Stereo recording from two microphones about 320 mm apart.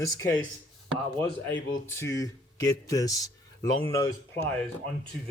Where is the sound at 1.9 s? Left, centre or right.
Centre.